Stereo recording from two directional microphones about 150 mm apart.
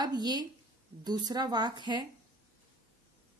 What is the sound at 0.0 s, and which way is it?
A woman's voice, 25° right (ahead or behind).